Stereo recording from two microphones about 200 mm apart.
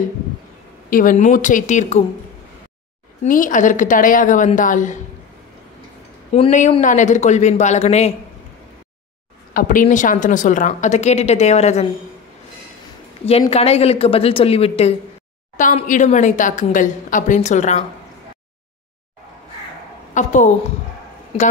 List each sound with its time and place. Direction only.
0.8 s a woman's voice: 40° left (ahead or behind)
3.3 s a woman's voice: 40° left (ahead or behind)
6.3 s a woman's voice: 35° left (ahead or behind)
9.5 s a woman's voice: 45° left (ahead or behind)
13.2 s a woman's voice: 30° left (ahead or behind)
20.2 s a woman's voice: 40° left (ahead or behind)